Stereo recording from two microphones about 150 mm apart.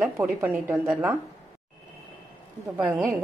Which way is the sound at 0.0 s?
15° right (ahead or behind).